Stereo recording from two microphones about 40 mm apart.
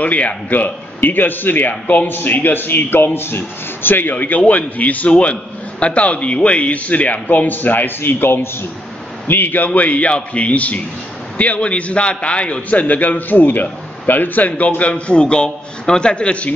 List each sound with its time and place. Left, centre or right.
0.0 s a man's voice: left
4.1 s a man's voice: left
9.3 s a man's voice: left
9.7 s a man's voice: left
14.8 s a man's voice: left